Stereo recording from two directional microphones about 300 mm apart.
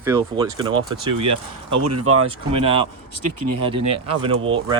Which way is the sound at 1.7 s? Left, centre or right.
Right.